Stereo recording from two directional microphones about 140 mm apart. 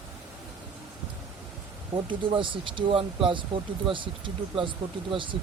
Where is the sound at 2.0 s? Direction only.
35° right (ahead or behind).